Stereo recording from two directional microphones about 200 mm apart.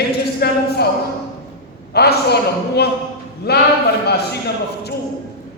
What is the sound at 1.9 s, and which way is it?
A man's voice, 55° left (ahead or behind).